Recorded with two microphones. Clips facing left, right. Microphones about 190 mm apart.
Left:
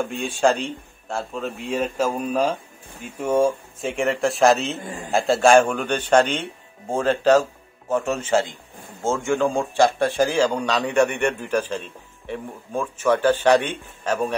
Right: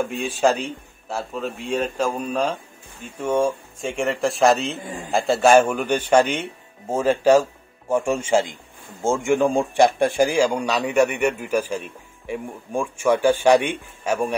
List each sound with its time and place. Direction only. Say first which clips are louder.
0.0 s a man's voice: even; centre (ahead or behind)